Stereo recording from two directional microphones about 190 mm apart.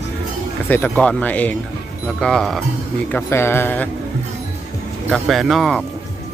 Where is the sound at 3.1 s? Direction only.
10° left (ahead or behind).